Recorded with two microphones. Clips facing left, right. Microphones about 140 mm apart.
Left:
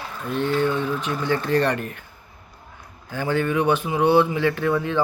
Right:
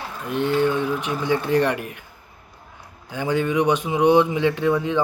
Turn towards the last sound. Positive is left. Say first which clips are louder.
# right 2 dB
turn(degrees=-15)  # may be behind; listen again after turning